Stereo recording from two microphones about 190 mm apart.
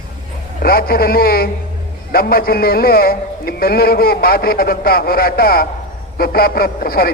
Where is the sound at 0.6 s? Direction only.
50° left (ahead or behind).